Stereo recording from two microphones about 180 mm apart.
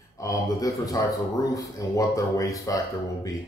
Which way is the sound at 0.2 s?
15° left (ahead or behind).